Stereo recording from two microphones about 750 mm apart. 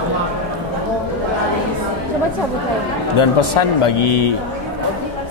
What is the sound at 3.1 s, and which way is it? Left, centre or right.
A man's voice, left.